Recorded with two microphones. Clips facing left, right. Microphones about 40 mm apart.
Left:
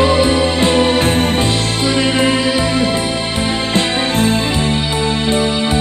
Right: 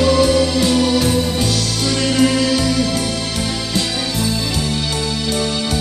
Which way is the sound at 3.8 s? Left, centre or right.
Left.